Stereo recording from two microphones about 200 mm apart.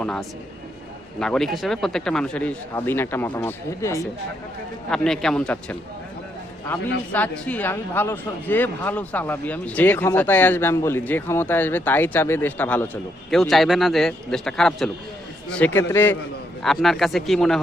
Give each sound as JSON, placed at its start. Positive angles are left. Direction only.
{"t": 0.0, "sound": "a man's voice", "side_deg": 5}
{"t": 4.9, "sound": "a man's voice", "side_deg": 0}
{"t": 16.6, "sound": "a man's voice", "side_deg": 0}